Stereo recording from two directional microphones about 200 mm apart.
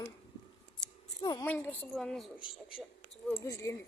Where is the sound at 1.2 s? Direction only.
20° left (ahead or behind).